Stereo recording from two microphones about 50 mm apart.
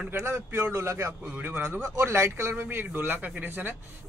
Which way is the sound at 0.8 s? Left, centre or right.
Right.